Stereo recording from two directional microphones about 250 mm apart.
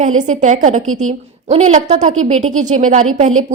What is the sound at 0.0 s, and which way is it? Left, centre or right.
A woman's voice, right.